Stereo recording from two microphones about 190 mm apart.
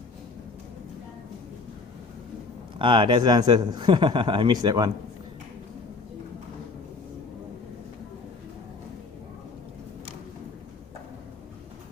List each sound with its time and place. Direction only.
2.7 s a man's voice: 25° right (ahead or behind)